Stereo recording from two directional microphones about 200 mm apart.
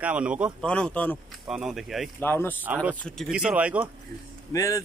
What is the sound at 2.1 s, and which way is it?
Speech, 10° left (ahead or behind).